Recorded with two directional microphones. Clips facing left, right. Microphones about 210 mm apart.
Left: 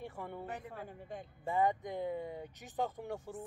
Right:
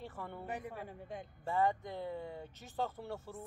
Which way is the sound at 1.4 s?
15° left (ahead or behind).